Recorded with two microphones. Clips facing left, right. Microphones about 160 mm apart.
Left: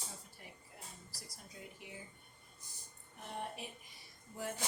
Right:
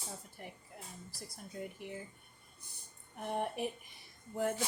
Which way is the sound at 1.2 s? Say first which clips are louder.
Right 10 dB; 55° right (ahead or behind).